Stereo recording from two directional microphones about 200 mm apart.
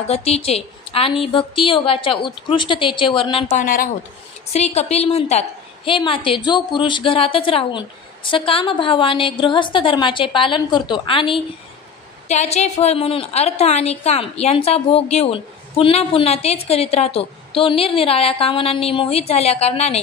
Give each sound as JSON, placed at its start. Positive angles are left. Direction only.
{"t": 0.1, "sound": "a woman's voice", "side_deg": 30}
{"t": 3.6, "sound": "a woman's voice", "side_deg": 45}
{"t": 4.5, "sound": "a woman's voice", "side_deg": 30}